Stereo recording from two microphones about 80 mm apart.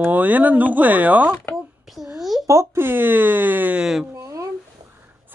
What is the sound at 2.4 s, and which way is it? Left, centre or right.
Speech, right.